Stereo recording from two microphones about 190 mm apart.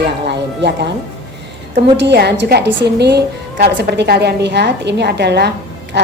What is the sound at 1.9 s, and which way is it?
A woman's voice, 65° right (ahead or behind).